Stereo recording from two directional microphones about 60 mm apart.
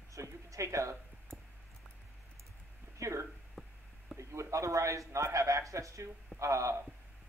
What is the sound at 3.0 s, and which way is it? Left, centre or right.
Speech, right.